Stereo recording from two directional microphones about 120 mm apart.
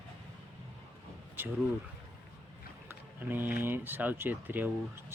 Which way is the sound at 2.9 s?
15° right (ahead or behind).